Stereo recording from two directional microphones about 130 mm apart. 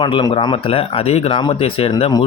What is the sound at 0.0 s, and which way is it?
Speech, 35° left (ahead or behind).